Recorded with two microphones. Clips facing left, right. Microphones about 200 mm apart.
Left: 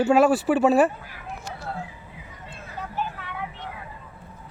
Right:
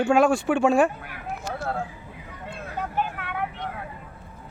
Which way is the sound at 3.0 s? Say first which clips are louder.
Right 2 dB; 55° right (ahead or behind).